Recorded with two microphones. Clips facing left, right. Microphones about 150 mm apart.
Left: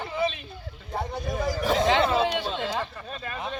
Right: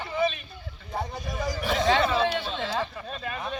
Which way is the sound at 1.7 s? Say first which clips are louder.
Even; 25° left (ahead or behind).